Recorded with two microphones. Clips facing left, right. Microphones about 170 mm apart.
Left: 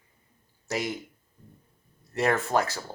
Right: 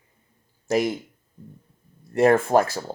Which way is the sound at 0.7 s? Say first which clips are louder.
Right 9 dB; 50° right (ahead or behind).